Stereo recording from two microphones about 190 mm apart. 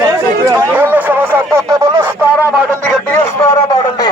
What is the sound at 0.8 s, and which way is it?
Speech, 10° right (ahead or behind).